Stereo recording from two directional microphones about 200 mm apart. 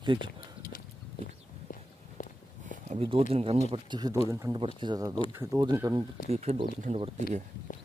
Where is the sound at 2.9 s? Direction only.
25° right (ahead or behind).